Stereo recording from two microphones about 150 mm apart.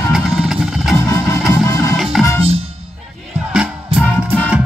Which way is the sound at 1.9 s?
Centre (ahead or behind).